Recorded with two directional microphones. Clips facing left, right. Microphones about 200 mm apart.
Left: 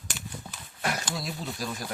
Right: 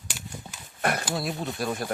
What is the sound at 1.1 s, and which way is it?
Speech, 60° right (ahead or behind).